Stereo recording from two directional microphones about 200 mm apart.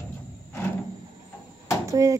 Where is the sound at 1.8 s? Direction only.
15° right (ahead or behind).